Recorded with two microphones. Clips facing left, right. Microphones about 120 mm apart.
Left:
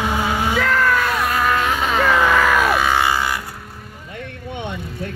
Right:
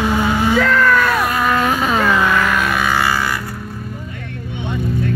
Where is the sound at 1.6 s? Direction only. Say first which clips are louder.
Right 3 dB; 45° right (ahead or behind).